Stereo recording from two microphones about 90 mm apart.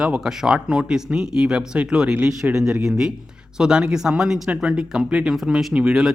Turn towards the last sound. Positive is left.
turn(degrees=-5)  # may be behind; listen again after turning